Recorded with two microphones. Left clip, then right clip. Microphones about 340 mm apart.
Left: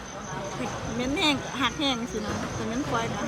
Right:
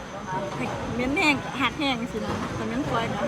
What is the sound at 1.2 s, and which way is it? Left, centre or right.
Speech, centre.